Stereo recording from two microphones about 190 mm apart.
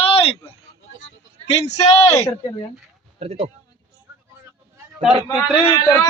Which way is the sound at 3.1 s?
35° right (ahead or behind).